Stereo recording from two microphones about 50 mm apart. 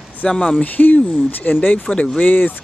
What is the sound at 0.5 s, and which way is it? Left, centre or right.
Speech, left.